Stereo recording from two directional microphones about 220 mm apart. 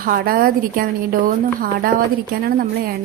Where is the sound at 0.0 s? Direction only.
40° right (ahead or behind).